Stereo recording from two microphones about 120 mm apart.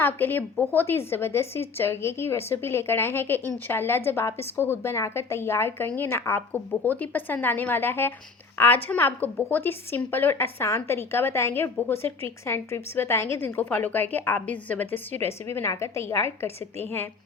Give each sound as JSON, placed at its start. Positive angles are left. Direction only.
{"t": 0.0, "sound": "a woman's voice", "side_deg": 15}